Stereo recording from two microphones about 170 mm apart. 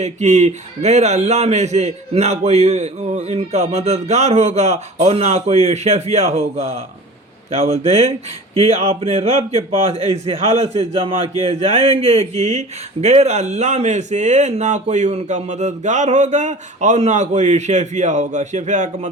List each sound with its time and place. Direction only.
0.0 s a man's voice: 40° right (ahead or behind)